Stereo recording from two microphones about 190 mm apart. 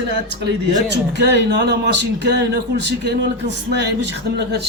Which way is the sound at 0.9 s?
65° right (ahead or behind).